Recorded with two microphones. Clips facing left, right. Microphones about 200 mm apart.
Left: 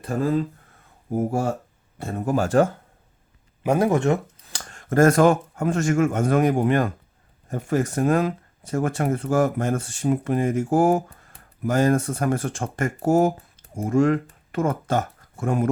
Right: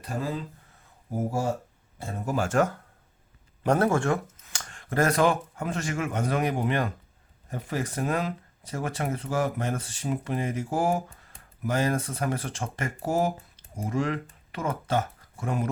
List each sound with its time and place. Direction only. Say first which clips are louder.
0.0 s speech: left 8 dB; 50° left (ahead or behind)
1.1 s speech: left 5 dB; 60° left (ahead or behind)
2.4 s speech: left 5 dB; 35° left (ahead or behind)
3.6 s speech: left 3 dB; 10° left (ahead or behind)
4.4 s speech: left 3 dB; 35° left (ahead or behind); by 15.7 s 50° left (ahead or behind)